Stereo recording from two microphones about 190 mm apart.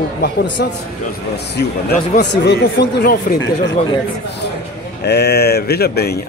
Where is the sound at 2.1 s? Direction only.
60° left (ahead or behind).